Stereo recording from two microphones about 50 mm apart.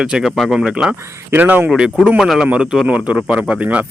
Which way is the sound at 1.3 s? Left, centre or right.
Right.